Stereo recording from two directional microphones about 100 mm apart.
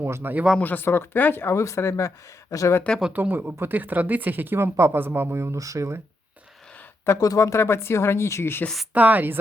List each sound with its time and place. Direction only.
0.0 s speech: 20° right (ahead or behind)
0.6 s speech: 20° left (ahead or behind)
3.1 s speech: 20° right (ahead or behind)
7.2 s speech: 35° left (ahead or behind)
8.6 s a woman's voice: centre (ahead or behind)
8.9 s speech: 15° right (ahead or behind)